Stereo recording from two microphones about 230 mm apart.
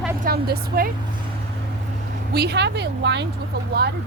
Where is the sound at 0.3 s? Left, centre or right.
Right.